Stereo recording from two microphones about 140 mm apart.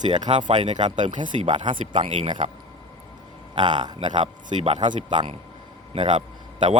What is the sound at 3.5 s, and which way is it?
Speech, 30° right (ahead or behind).